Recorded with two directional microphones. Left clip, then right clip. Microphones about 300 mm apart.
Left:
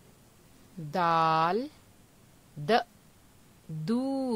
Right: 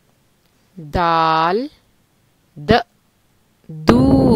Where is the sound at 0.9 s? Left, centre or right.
Centre.